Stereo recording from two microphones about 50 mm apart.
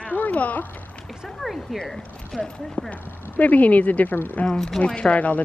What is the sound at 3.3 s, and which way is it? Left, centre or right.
Speech, left.